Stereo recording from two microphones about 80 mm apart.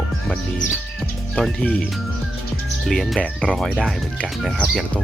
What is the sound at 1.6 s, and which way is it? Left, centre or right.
Speech, centre.